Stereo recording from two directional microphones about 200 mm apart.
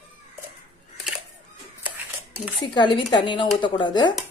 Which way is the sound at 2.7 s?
20° left (ahead or behind).